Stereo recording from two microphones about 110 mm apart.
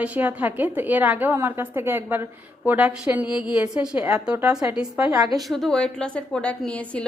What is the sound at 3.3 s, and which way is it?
Speech, 45° left (ahead or behind).